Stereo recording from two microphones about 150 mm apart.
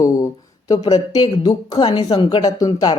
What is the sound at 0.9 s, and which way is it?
A woman's voice, 25° left (ahead or behind).